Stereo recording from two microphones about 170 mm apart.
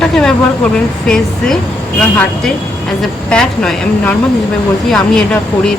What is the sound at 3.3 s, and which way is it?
Speech, 5° left (ahead or behind).